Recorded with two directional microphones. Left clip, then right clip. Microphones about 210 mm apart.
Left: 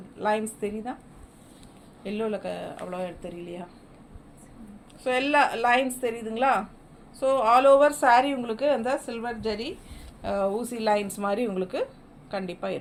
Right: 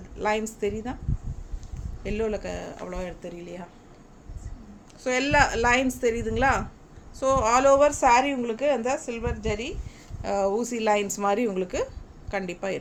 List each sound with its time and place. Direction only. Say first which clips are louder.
0.2 s a woman's voice: even; 25° right (ahead or behind)
2.0 s a woman's voice: right 1 dB; 25° right (ahead or behind)
5.0 s a woman's voice: right 1 dB; 25° right (ahead or behind)
7.9 s a woman's voice: even; 50° right (ahead or behind)
8.2 s a woman's voice: right 1 dB; 15° right (ahead or behind)
10.2 s a woman's voice: right 2 dB; 25° right (ahead or behind)